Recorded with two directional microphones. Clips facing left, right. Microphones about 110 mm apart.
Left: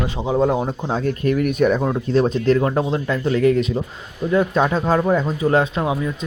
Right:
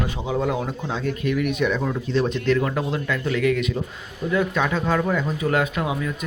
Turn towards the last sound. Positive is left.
turn(degrees=30)  # may be behind; listen again after turning